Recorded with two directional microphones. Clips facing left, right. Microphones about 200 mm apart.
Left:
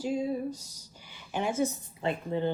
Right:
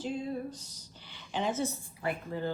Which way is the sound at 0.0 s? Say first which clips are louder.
Left 5 dB; 10° left (ahead or behind).